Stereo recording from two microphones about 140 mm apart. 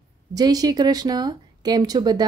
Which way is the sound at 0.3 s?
25° right (ahead or behind).